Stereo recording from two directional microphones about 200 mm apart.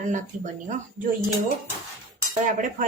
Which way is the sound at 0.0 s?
40° right (ahead or behind).